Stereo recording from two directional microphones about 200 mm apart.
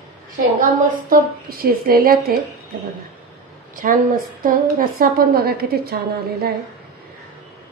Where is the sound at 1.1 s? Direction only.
45° right (ahead or behind).